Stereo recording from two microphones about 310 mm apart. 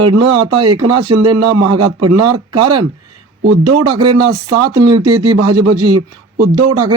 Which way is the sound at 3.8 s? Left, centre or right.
Right.